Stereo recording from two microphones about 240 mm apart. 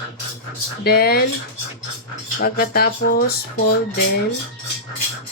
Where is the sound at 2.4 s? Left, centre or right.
Left.